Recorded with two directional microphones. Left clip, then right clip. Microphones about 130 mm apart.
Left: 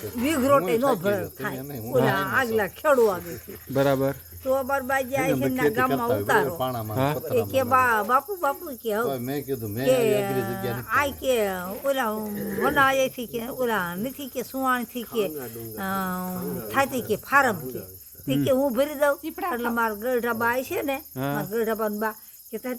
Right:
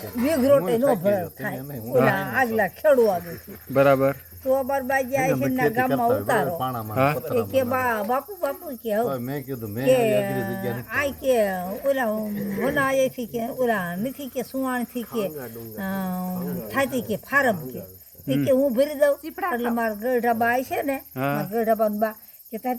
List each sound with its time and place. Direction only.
0.2 s speech: 25° left (ahead or behind)